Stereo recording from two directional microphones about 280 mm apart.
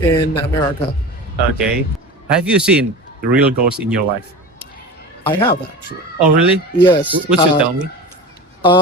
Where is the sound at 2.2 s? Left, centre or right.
Centre.